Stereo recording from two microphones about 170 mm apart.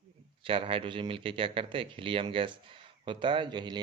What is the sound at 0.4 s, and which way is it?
Speech, 30° right (ahead or behind).